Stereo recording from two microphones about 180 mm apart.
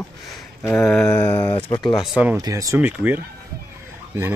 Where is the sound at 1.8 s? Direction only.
25° left (ahead or behind).